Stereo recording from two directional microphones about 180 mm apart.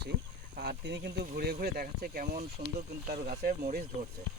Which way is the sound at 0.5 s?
65° right (ahead or behind).